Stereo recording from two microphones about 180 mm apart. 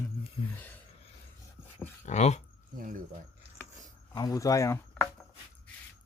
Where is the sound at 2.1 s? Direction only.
40° left (ahead or behind).